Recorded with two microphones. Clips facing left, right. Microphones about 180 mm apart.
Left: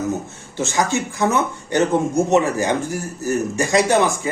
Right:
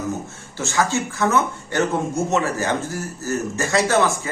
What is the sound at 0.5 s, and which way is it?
A man's voice, 20° left (ahead or behind).